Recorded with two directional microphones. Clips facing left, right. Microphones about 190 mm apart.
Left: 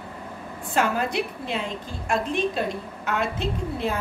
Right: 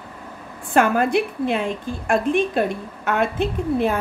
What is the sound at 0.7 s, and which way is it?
A woman's voice, 55° right (ahead or behind).